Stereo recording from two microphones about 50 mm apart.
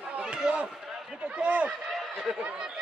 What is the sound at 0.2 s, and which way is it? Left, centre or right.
Run, right.